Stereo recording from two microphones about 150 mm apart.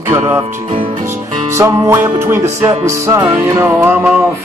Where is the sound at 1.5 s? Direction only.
15° right (ahead or behind).